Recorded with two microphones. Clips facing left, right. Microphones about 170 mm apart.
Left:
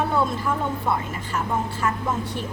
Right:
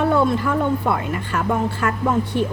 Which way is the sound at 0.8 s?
60° right (ahead or behind).